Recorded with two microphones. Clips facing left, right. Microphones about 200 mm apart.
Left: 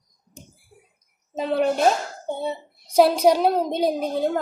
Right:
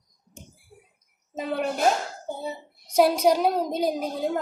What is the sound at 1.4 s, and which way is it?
A woman's voice, 30° left (ahead or behind).